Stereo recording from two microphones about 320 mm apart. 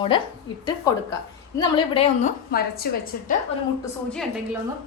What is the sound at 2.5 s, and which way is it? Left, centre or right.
Speech, left.